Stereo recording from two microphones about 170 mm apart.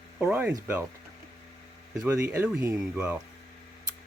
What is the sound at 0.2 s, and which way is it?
Speech, 10° right (ahead or behind).